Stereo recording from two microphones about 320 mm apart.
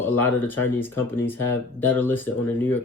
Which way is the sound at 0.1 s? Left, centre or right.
Centre.